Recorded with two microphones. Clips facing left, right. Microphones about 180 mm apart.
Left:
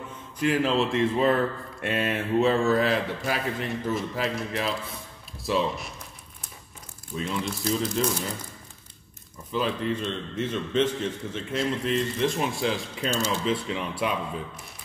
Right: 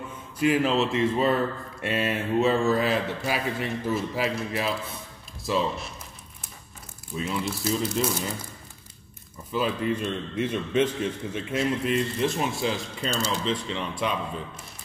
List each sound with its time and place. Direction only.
0.4 s speech: 5° right (ahead or behind)
7.2 s speech: 5° right (ahead or behind)
9.5 s a man's voice: 5° right (ahead or behind)
13.1 s a man's voice: 15° right (ahead or behind)
13.5 s speech: 5° left (ahead or behind)